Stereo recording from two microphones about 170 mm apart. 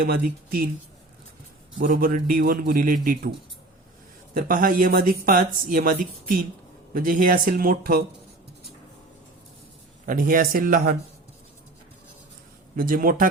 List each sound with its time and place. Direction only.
0.0 s speech: 60° right (ahead or behind)
1.8 s speech: 60° right (ahead or behind)
4.4 s speech: 55° right (ahead or behind)
10.1 s speech: 55° right (ahead or behind)
12.7 s speech: 55° right (ahead or behind)